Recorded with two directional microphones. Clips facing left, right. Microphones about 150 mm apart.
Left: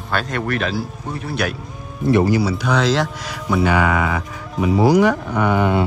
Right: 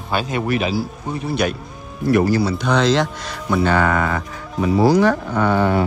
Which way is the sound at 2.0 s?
20° left (ahead or behind).